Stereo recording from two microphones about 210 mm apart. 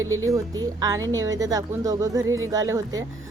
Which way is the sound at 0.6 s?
20° right (ahead or behind).